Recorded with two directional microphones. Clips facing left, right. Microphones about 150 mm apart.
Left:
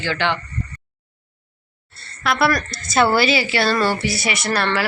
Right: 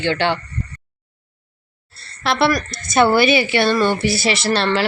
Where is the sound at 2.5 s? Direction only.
15° right (ahead or behind).